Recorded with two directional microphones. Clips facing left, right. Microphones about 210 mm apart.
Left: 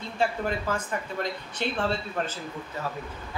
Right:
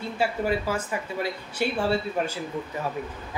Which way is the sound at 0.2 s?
5° right (ahead or behind).